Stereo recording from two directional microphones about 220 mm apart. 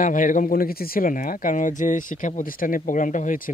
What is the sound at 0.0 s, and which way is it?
Speech, 35° left (ahead or behind).